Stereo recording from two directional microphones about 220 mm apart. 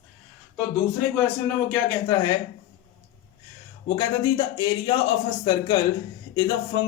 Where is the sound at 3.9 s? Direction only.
15° left (ahead or behind).